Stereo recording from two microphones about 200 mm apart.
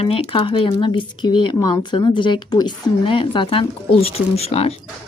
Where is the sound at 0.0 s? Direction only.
30° left (ahead or behind).